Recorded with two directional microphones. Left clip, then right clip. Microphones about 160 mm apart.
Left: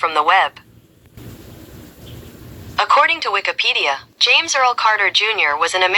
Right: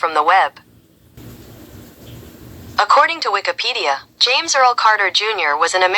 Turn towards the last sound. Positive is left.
turn(degrees=-35)  # may be behind; listen again after turning